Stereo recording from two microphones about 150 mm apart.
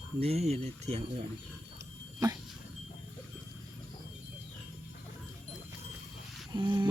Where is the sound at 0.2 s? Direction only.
45° right (ahead or behind).